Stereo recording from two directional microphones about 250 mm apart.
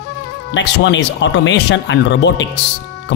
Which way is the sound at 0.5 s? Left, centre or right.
Left.